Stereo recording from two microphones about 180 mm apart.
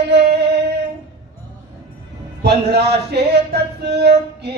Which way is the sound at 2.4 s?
65° right (ahead or behind).